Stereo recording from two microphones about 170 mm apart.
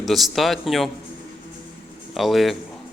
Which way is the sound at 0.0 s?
Centre (ahead or behind).